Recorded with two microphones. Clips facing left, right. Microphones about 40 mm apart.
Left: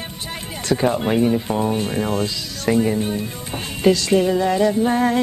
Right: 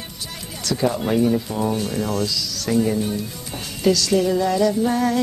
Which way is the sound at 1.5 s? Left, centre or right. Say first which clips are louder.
Left 2 dB; left.